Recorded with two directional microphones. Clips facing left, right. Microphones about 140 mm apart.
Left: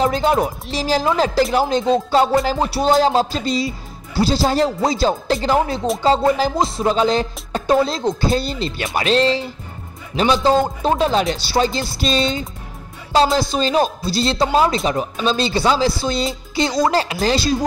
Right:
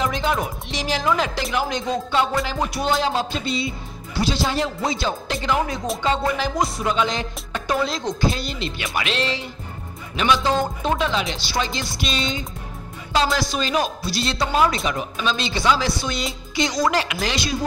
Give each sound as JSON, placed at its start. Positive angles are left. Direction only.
{"t": 0.0, "sound": "music", "side_deg": 35}